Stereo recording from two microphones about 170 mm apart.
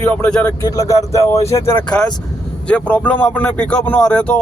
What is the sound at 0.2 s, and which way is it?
Speech, 5° left (ahead or behind).